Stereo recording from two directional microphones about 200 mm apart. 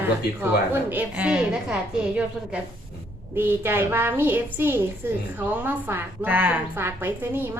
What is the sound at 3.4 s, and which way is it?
A woman's voice, 10° right (ahead or behind).